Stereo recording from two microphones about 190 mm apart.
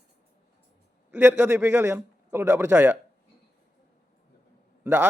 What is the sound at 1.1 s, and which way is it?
A man's voice, 10° right (ahead or behind).